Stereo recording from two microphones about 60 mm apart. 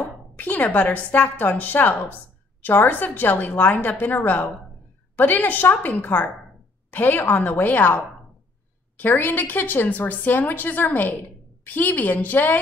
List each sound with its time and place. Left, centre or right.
0.0 s a woman's voice: left